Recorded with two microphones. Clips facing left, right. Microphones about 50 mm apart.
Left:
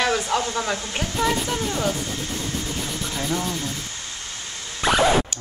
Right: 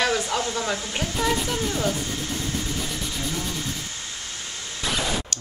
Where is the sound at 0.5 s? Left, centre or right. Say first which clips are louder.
Left 1 dB; centre.